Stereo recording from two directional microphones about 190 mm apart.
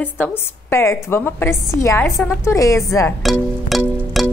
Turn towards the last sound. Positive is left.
turn(degrees=-5)  # may be behind; listen again after turning